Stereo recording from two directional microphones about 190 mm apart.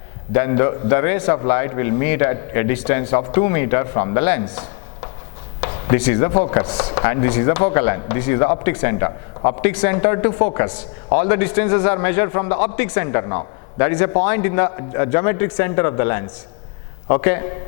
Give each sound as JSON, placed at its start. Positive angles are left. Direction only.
{"t": 0.3, "sound": "speech", "side_deg": 15}
{"t": 5.5, "sound": "a sound", "side_deg": 25}
{"t": 6.0, "sound": "speech", "side_deg": 15}